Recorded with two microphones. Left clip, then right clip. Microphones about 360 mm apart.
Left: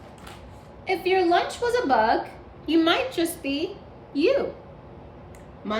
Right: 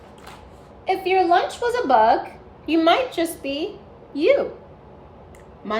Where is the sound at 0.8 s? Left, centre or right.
Centre.